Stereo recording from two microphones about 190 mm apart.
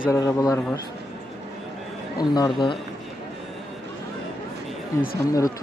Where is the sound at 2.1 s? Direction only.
20° left (ahead or behind).